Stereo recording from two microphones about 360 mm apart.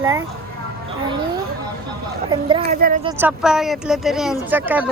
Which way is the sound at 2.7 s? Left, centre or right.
Right.